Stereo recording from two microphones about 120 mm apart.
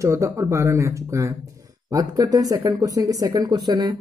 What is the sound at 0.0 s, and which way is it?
Speech, 25° right (ahead or behind).